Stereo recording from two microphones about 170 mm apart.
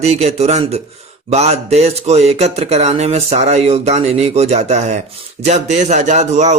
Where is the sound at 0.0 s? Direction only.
40° right (ahead or behind).